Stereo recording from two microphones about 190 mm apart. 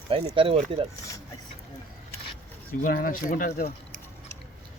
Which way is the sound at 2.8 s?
45° left (ahead or behind).